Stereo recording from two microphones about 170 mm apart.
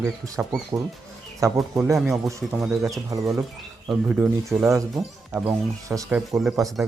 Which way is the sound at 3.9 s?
5° right (ahead or behind).